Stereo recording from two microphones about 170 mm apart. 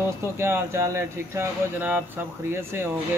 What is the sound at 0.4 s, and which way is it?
Speech, 15° right (ahead or behind).